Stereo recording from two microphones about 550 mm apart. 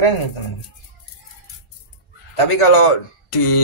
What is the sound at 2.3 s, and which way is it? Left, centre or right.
A man's voice, left.